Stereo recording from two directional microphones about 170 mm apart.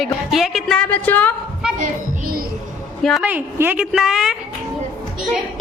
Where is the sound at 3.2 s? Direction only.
10° right (ahead or behind).